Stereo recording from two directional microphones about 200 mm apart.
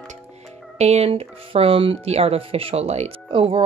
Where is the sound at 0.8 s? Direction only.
30° right (ahead or behind).